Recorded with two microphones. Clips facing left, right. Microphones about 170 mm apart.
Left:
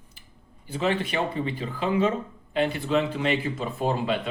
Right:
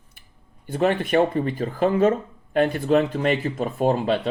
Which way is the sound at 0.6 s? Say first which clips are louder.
Right 5 dB; 55° right (ahead or behind).